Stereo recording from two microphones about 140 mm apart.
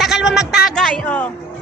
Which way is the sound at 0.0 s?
Centre (ahead or behind).